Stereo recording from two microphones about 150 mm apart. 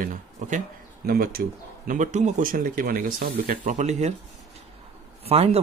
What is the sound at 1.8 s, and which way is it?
Speech, 55° right (ahead or behind).